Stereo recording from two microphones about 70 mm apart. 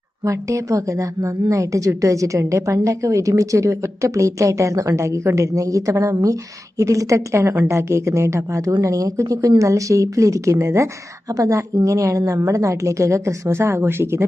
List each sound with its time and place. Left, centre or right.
0.3 s a woman's voice: right